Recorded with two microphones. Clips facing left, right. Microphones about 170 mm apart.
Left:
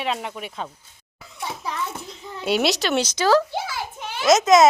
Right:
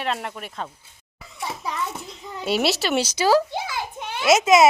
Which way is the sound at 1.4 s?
Centre (ahead or behind).